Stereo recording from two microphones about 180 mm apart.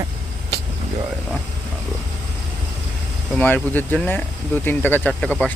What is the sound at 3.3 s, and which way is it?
Speech, 10° left (ahead or behind).